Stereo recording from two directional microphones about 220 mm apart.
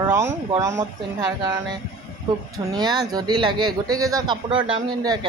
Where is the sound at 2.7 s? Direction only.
20° right (ahead or behind).